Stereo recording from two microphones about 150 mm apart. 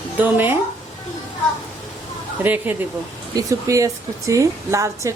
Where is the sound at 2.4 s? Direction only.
10° right (ahead or behind).